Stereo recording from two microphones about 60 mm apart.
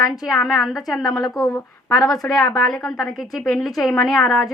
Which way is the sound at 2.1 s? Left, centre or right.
Left.